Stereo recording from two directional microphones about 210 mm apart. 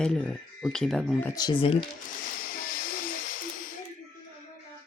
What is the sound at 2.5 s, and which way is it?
Hiss, 45° left (ahead or behind).